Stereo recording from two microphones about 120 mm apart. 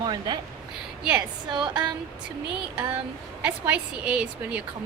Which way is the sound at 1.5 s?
40° right (ahead or behind).